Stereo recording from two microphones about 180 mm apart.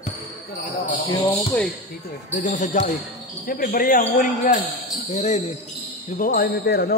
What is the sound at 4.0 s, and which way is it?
Speech, 40° left (ahead or behind).